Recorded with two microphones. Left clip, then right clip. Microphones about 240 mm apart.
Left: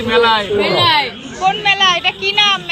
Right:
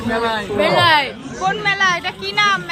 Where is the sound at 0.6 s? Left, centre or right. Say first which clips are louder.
Right 5 dB; centre.